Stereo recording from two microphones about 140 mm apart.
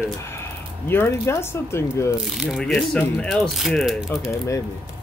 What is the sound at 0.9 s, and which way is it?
Speech, 15° left (ahead or behind).